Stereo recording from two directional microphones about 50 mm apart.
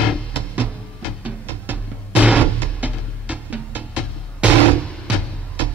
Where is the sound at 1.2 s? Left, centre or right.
Right.